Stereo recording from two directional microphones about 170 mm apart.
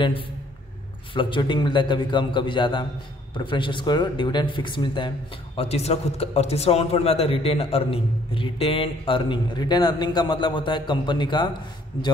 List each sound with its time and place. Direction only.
1.1 s a man's voice: 30° left (ahead or behind)